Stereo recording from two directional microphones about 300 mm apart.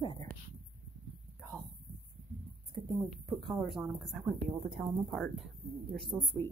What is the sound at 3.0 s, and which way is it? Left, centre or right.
Speech, centre.